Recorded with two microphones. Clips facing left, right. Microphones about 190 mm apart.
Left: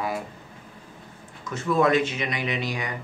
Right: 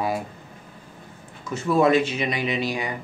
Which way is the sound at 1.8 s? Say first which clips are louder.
Right 3 dB; 30° right (ahead or behind).